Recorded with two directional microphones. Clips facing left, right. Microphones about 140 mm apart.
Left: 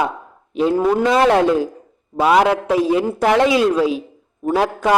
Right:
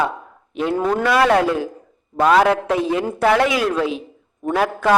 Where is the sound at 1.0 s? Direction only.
25° left (ahead or behind).